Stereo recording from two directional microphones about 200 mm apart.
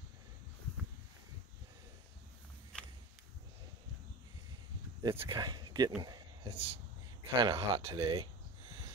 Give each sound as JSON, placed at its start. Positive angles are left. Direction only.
{"t": 5.0, "sound": "speech", "side_deg": -25}